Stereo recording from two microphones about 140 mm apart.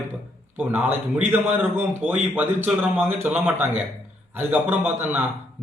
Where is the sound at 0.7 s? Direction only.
15° right (ahead or behind).